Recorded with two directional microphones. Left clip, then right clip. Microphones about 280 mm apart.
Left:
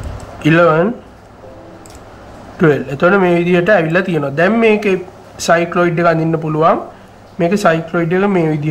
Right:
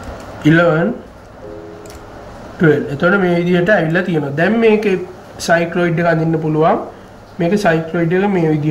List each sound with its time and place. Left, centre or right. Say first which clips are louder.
0.4 s speech: left 2 dB; centre
2.7 s speech: left 1 dB; centre
4.5 s speech: right 1 dB; left
7.3 s speech: left 2 dB; centre
7.7 s speech: even; left